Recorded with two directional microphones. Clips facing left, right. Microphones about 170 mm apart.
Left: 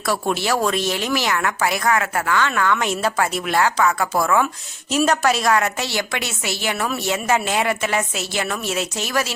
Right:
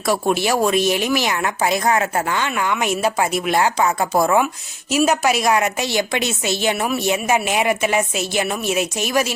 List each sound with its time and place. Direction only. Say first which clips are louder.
0.1 s a woman's voice: right 3 dB; 15° right (ahead or behind)
4.9 s a woman's voice: right 1 dB; 10° right (ahead or behind)